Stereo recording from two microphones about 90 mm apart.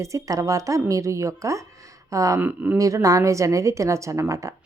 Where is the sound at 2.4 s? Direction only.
20° right (ahead or behind).